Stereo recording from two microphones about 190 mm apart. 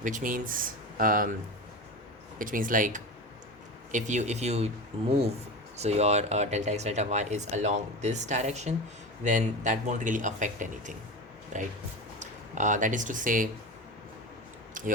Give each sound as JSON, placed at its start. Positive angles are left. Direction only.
{"t": 0.0, "sound": "speech", "side_deg": -45}
{"t": 2.4, "sound": "speech", "side_deg": -45}
{"t": 5.7, "sound": "speech", "side_deg": -35}
{"t": 14.7, "sound": "a sound", "side_deg": -45}